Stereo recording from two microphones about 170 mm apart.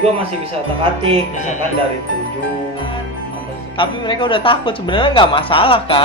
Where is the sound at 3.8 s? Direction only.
30° left (ahead or behind).